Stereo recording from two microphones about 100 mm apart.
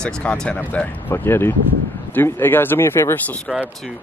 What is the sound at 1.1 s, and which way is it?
Speech, 25° left (ahead or behind).